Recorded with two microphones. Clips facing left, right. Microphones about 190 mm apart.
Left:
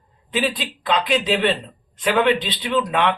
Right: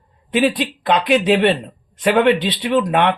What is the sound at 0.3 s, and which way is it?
Speech, 60° right (ahead or behind).